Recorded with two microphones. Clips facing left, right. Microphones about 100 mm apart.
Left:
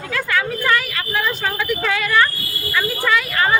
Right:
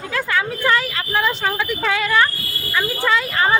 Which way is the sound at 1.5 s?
15° right (ahead or behind).